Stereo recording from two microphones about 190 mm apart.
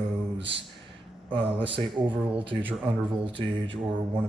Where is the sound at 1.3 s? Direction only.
30° right (ahead or behind).